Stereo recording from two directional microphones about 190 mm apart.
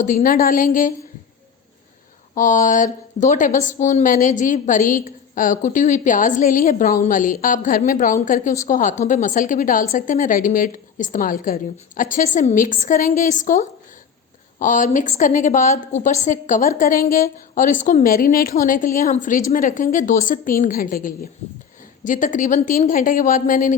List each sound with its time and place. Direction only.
0.0 s a woman's voice: 45° left (ahead or behind)
2.3 s a woman's voice: 45° left (ahead or behind)